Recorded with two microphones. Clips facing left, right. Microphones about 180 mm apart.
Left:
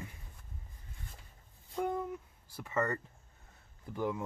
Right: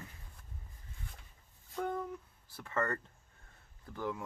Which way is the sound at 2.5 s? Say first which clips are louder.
Left 2 dB; 10° left (ahead or behind).